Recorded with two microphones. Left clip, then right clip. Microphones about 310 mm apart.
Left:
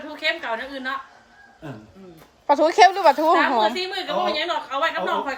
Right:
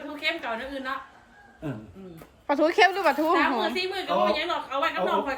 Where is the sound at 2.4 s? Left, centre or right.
Centre.